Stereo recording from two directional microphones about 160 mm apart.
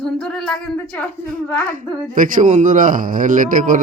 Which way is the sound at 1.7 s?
55° right (ahead or behind).